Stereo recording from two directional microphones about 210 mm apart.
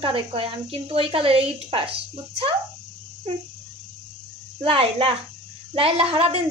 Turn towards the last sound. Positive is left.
turn(degrees=-25)  # may be behind; listen again after turning